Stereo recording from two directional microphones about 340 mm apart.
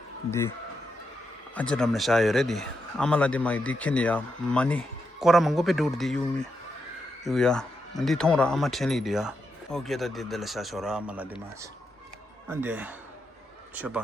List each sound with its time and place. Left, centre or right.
0.3 s speech: centre
1.5 s speech: centre
7.3 s speech: centre
12.5 s speech: centre